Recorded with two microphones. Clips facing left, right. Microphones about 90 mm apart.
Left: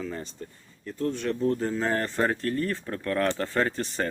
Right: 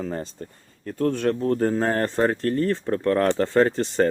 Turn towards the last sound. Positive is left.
turn(degrees=-30)  # may be behind; listen again after turning